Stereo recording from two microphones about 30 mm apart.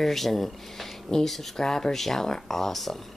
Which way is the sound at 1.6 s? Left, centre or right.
Centre.